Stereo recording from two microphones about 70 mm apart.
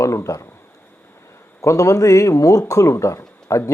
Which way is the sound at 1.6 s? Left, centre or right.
Left.